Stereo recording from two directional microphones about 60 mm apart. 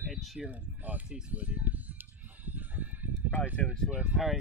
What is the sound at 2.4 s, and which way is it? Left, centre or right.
Fowl, right.